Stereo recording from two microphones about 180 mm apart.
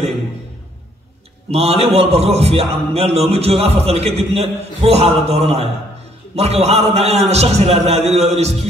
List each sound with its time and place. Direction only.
1.5 s a man's voice: 35° right (ahead or behind)